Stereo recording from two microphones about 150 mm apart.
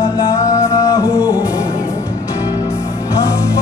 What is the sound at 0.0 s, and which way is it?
Music, 20° left (ahead or behind).